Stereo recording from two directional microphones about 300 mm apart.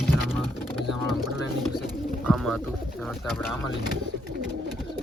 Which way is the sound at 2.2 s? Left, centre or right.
Centre.